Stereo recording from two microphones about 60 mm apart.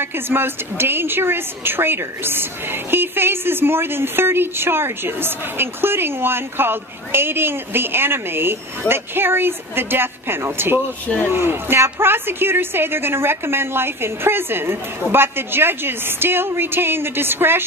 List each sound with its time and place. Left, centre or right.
0.0 s a woman's voice: right